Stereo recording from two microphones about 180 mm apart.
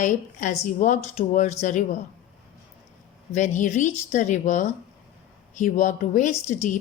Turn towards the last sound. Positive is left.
turn(degrees=45)  # may be behind; listen again after turning